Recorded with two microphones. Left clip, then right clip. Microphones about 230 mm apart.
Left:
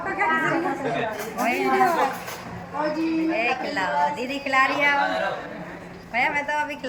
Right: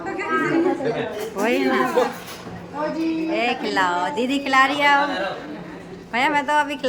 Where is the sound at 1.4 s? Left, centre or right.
Centre.